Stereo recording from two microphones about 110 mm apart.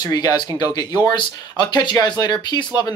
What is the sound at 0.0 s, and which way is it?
Speech, 35° left (ahead or behind).